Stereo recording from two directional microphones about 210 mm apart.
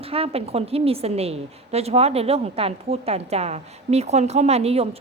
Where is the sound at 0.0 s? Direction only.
25° right (ahead or behind).